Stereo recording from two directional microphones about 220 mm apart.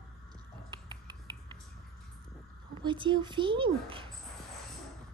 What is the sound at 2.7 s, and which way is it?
Speech, 20° right (ahead or behind).